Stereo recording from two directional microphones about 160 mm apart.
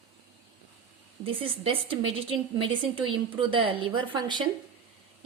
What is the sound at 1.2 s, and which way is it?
A woman's voice, 35° right (ahead or behind).